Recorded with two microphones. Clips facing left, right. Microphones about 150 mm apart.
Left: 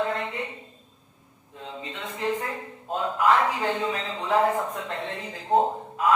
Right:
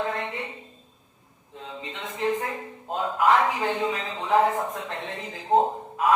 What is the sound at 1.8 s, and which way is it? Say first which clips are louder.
Speech: right 2 dB; 20° right (ahead or behind).